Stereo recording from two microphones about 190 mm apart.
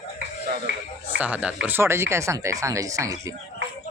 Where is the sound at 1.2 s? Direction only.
5° right (ahead or behind).